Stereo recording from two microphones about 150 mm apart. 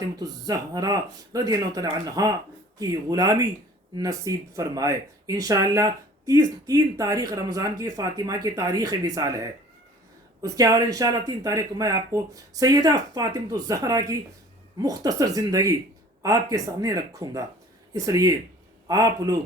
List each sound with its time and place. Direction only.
0.2 s speech: 25° right (ahead or behind)